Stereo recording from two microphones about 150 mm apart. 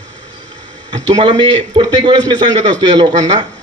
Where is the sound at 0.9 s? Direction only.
35° right (ahead or behind).